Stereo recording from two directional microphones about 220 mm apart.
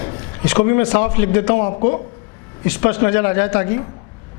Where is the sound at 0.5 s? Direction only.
20° left (ahead or behind).